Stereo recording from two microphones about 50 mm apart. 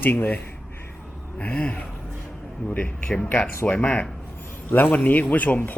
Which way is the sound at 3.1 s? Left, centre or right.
Centre.